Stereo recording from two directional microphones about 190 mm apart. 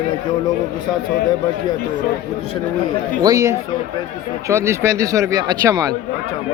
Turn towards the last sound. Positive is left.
turn(degrees=-20)  # may be behind; listen again after turning